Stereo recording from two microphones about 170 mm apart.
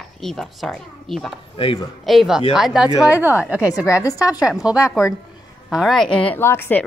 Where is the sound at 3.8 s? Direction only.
20° left (ahead or behind).